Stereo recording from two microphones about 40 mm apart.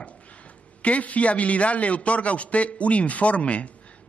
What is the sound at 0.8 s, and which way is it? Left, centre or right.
A man's voice, left.